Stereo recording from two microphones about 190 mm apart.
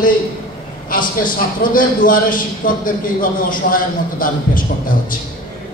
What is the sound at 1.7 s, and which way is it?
A man's voice, 45° left (ahead or behind).